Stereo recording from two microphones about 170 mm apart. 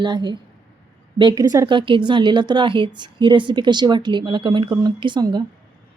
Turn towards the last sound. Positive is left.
turn(degrees=-25)  # may be behind; listen again after turning